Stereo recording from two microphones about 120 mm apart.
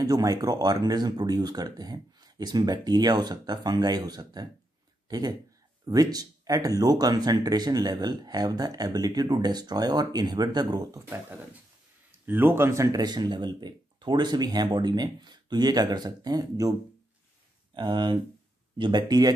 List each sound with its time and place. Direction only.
0.0 s speech: 30° right (ahead or behind)
5.0 s a sound: 35° right (ahead or behind)
5.9 s speech: 30° right (ahead or behind)
11.1 s speech: 15° right (ahead or behind)
17.7 s speech: 40° right (ahead or behind)